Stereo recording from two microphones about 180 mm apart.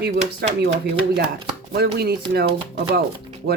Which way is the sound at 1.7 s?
60° right (ahead or behind).